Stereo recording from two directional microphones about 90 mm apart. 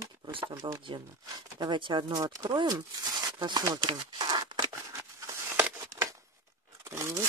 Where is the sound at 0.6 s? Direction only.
60° right (ahead or behind).